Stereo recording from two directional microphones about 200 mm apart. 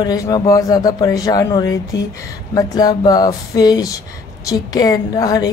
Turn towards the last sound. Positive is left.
turn(degrees=20)  # may be behind; listen again after turning